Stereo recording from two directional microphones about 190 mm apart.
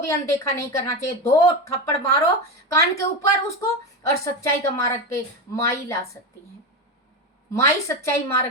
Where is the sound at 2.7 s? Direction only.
15° left (ahead or behind).